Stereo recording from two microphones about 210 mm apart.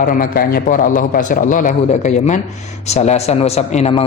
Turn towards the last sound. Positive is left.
turn(degrees=30)  # may be behind; listen again after turning